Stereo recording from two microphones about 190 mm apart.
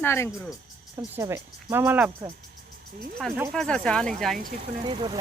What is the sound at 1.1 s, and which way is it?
Speech, 15° right (ahead or behind).